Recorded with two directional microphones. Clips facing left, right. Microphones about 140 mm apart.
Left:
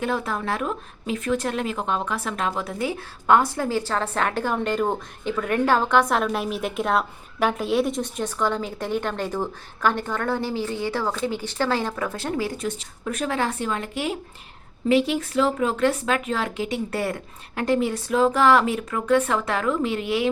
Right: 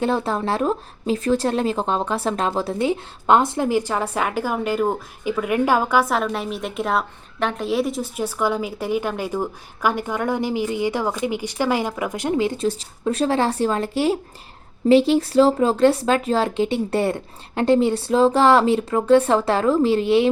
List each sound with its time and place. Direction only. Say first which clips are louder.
0.0 s speech: right 4 dB; 30° right (ahead or behind)